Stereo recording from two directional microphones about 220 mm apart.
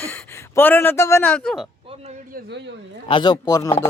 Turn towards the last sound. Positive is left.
turn(degrees=15)  # may be behind; listen again after turning